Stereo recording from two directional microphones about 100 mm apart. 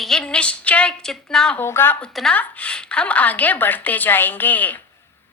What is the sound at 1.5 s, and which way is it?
A woman's voice, 25° left (ahead or behind).